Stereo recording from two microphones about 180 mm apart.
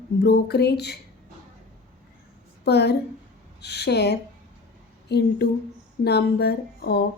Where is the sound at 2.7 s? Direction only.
65° left (ahead or behind).